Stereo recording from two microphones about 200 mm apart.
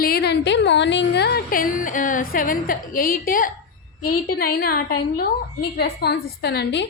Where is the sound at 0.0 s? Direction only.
50° left (ahead or behind).